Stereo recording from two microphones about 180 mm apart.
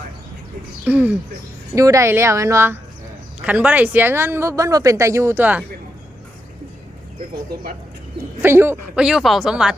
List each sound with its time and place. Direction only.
0.9 s speech: 10° right (ahead or behind)
8.4 s speech: 15° right (ahead or behind)
9.0 s speech: centre (ahead or behind)